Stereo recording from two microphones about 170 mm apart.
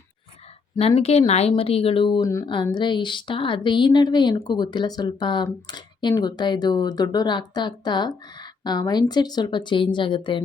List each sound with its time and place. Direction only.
0.8 s a woman's voice: 35° left (ahead or behind)